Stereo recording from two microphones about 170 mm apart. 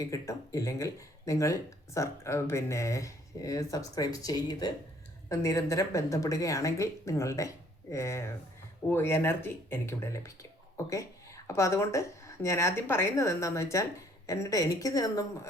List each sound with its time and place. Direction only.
0.0 s speech: 20° left (ahead or behind)